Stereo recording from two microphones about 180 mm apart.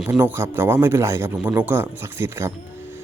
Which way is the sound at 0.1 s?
15° right (ahead or behind).